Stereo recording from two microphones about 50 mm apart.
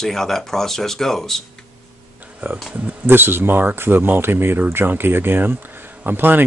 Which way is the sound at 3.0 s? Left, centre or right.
Right.